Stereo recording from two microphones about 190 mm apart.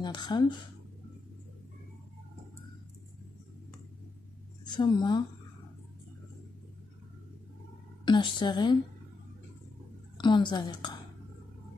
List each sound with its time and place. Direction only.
0.0 s a woman's voice: 25° left (ahead or behind)
4.6 s a woman's voice: 25° left (ahead or behind)
8.0 s a woman's voice: 25° left (ahead or behind)
10.1 s a woman's voice: 25° left (ahead or behind)